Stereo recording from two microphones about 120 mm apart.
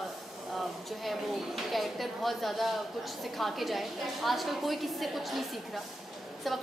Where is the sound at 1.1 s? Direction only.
Centre (ahead or behind).